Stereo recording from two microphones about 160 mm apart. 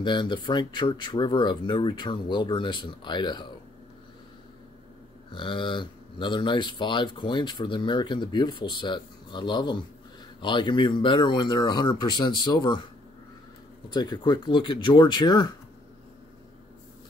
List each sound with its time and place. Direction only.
0.0 s speech: 30° left (ahead or behind)
5.3 s speech: 30° left (ahead or behind)
13.8 s speech: 25° left (ahead or behind)